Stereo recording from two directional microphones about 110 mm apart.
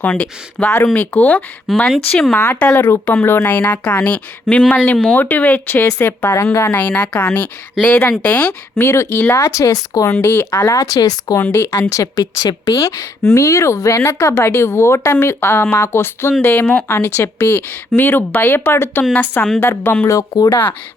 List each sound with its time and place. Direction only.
0.0 s a woman's voice: 10° left (ahead or behind)
1.6 s a woman's voice: 5° left (ahead or behind)
8.9 s speech: 25° left (ahead or behind)
11.5 s speech: 20° left (ahead or behind)
11.9 s a woman's voice: 30° left (ahead or behind)
20.1 s speech: 35° left (ahead or behind)